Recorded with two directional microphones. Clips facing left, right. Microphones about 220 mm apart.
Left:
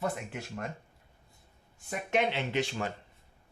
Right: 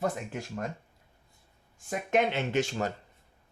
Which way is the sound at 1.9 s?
45° right (ahead or behind).